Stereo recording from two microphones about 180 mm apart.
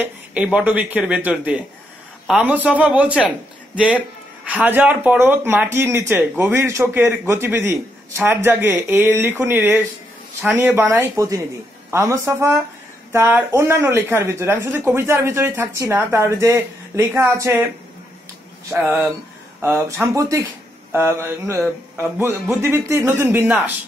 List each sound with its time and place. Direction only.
0.0 s speech: 10° right (ahead or behind)
18.7 s speech: 10° right (ahead or behind)
20.2 s speech: 15° right (ahead or behind)